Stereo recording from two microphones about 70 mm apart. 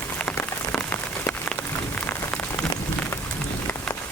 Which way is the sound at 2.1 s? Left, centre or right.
Left.